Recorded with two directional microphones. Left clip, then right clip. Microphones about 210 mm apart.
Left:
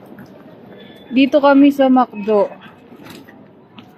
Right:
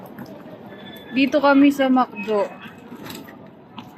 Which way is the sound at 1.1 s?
10° left (ahead or behind).